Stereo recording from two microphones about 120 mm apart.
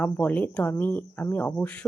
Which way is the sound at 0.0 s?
15° left (ahead or behind).